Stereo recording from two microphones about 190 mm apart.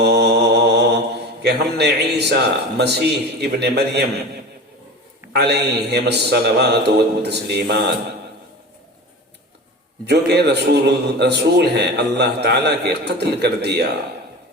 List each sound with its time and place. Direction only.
0.0 s mantra: 60° right (ahead or behind)
5.3 s a man's voice: 60° right (ahead or behind)
10.1 s a man's voice: 60° right (ahead or behind)